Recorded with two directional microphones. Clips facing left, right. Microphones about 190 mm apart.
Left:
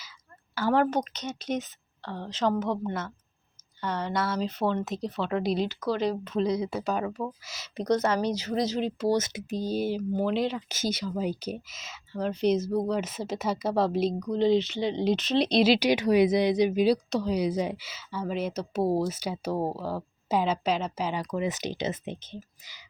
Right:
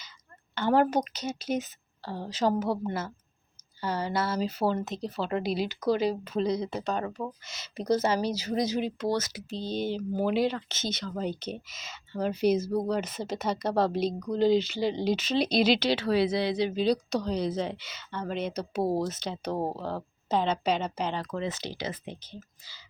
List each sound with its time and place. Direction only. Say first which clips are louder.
0.5 s a woman's voice: even; centre (ahead or behind)
5.6 s a woman's voice: right 2 dB; 15° right (ahead or behind)
6.1 s speech: left 1 dB; 5° right (ahead or behind)
9.1 s speech: left 3 dB; 20° left (ahead or behind)
9.6 s speech: left 2 dB; 10° left (ahead or behind)
10.7 s speech: left 4 dB; 10° left (ahead or behind)
15.8 s speech: left 4 dB; 15° left (ahead or behind)
16.9 s speech: left 2 dB; 5° left (ahead or behind)
21.2 s speech: left 3 dB; 15° left (ahead or behind)